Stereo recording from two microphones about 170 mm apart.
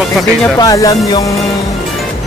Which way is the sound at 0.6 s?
20° left (ahead or behind).